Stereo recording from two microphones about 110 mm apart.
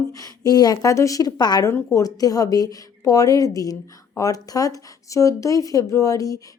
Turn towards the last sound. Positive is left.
turn(degrees=30)  # may be behind; listen again after turning